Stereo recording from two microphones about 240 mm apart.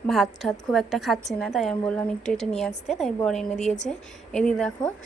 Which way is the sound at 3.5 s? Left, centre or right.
Left.